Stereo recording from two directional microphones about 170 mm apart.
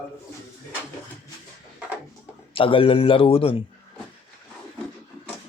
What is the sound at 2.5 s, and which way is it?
A man's voice, 30° left (ahead or behind).